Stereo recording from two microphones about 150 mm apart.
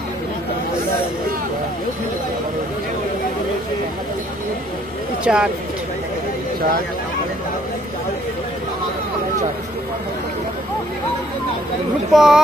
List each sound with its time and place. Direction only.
5.2 s speech: 5° right (ahead or behind)
12.1 s speech: centre (ahead or behind)